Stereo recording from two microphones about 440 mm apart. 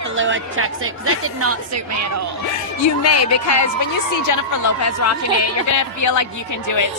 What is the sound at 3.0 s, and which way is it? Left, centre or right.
A woman's voice, left.